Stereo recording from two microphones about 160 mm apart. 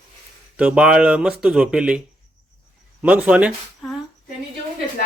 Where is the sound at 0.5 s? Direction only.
5° right (ahead or behind).